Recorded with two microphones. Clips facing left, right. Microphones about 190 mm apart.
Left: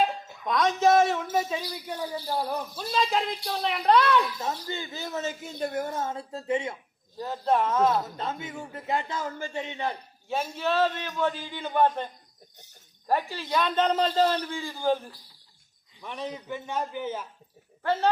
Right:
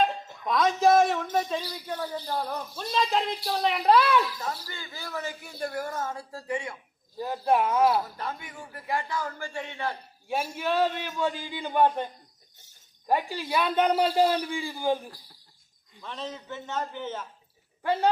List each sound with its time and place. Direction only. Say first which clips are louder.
0.0 s speech: even; centre (ahead or behind)
4.4 s speech: left 3 dB; 25° left (ahead or behind)
7.2 s a man's voice: right 1 dB; 10° right (ahead or behind)
8.0 s speech: left 3 dB; 20° left (ahead or behind)
10.5 s a man's voice: left 1 dB; 15° right (ahead or behind)
16.0 s a man's voice: left 2 dB; 15° left (ahead or behind)
17.8 s a man's voice: even; 10° right (ahead or behind)